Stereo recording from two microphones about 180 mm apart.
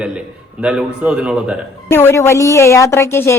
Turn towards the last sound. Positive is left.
turn(degrees=15)  # may be behind; listen again after turning